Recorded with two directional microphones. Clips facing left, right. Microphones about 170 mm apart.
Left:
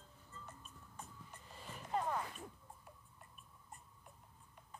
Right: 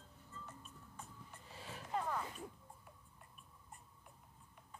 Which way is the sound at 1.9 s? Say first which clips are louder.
Left 2 dB; 30° left (ahead or behind).